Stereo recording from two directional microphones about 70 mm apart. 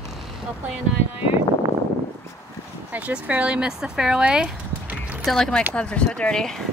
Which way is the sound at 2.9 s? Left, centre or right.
Right.